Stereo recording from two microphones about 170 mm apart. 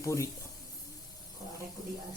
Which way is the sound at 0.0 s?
20° left (ahead or behind).